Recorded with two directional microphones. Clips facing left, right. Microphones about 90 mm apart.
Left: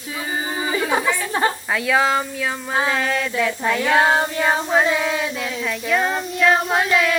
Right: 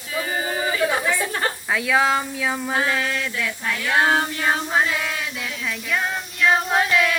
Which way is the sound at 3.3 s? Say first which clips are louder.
Left 6 dB; 15° left (ahead or behind).